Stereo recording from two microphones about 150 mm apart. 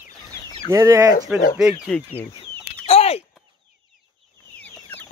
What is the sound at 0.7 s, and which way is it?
Speech, 20° right (ahead or behind).